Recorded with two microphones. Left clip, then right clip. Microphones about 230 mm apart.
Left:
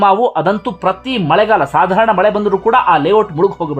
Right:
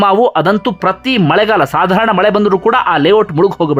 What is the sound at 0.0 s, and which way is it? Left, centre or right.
Speech, centre.